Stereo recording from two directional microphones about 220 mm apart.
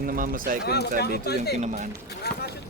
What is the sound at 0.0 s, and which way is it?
Speech, 40° right (ahead or behind).